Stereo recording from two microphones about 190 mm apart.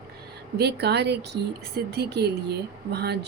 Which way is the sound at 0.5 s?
60° right (ahead or behind).